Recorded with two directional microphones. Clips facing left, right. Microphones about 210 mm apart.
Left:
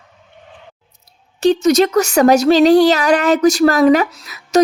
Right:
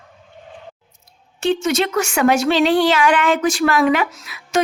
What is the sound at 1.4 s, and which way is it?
Speech, 40° left (ahead or behind).